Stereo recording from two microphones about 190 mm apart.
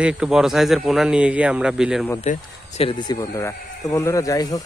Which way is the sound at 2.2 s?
40° left (ahead or behind).